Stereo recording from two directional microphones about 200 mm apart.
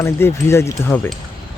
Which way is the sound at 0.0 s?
15° left (ahead or behind).